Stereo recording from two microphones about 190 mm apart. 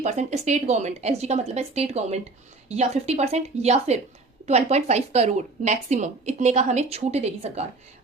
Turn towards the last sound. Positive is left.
turn(degrees=-35)  # may be behind; listen again after turning